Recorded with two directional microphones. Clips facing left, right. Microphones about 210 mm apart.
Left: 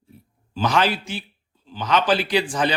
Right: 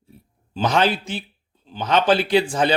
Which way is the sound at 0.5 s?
25° right (ahead or behind).